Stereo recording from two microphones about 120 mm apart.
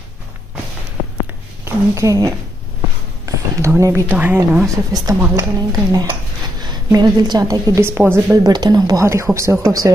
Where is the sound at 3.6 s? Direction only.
25° right (ahead or behind).